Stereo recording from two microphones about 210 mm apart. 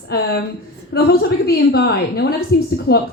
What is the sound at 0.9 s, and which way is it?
A woman's voice, 45° left (ahead or behind).